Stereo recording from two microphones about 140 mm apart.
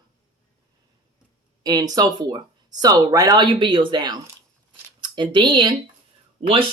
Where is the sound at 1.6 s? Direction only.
30° right (ahead or behind).